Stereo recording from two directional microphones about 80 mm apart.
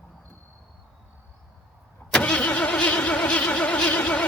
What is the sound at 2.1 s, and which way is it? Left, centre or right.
Vehicle, centre.